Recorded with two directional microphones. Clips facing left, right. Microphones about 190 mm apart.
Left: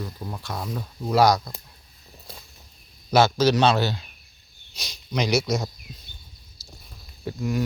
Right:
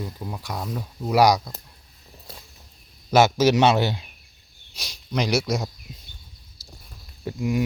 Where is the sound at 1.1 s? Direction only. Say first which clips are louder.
Right 1 dB; 10° right (ahead or behind).